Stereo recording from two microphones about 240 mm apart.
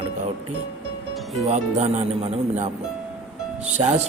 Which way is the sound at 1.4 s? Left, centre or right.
Right.